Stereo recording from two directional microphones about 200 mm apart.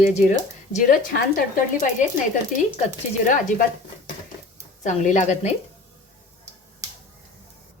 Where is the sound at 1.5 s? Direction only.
40° left (ahead or behind).